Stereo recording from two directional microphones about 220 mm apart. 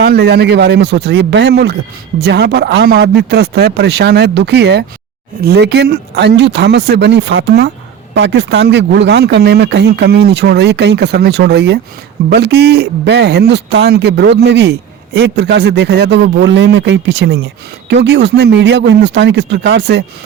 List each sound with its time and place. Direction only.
0.0 s a man's voice: 45° right (ahead or behind)